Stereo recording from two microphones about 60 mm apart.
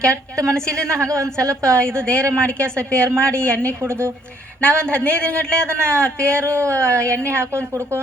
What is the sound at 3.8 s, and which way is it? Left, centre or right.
Speech, right.